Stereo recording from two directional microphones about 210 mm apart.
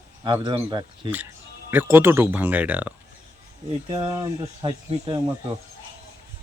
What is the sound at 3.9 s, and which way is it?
Speech, 20° right (ahead or behind).